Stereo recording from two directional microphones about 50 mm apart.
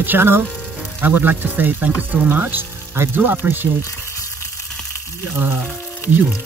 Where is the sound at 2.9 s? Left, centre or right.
Right.